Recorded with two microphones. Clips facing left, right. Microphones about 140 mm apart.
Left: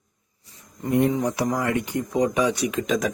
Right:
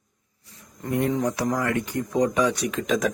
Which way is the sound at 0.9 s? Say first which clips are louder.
Left 3 dB; 20° left (ahead or behind).